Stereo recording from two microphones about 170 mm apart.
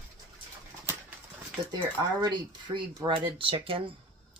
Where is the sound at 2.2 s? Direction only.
25° right (ahead or behind).